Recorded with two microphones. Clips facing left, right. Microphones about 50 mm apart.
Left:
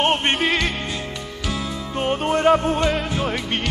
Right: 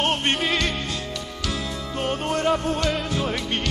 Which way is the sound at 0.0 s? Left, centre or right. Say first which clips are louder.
Left 3 dB; left.